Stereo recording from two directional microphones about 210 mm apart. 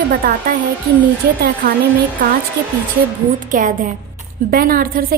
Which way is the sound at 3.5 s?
40° right (ahead or behind).